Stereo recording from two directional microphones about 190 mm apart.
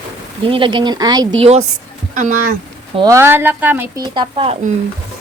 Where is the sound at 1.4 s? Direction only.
35° right (ahead or behind).